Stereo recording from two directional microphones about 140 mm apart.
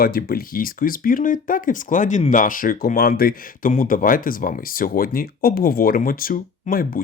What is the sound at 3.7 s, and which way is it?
Speech, 75° left (ahead or behind).